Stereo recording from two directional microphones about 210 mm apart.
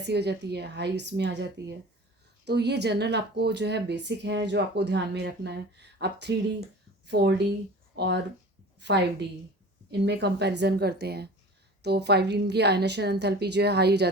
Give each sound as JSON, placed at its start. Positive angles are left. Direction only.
{"t": 0.0, "sound": "a woman's voice", "side_deg": -50}